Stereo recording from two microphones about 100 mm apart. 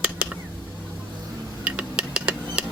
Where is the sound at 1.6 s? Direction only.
10° right (ahead or behind).